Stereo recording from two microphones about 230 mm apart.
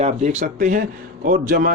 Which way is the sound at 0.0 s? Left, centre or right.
Right.